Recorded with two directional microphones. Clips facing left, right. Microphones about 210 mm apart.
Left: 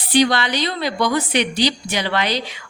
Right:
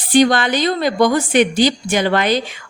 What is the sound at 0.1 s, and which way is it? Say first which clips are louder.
A woman's voice: right 4 dB; 50° right (ahead or behind).